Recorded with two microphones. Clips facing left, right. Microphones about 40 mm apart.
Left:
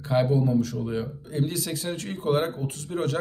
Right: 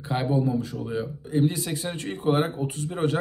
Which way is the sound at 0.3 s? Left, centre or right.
Right.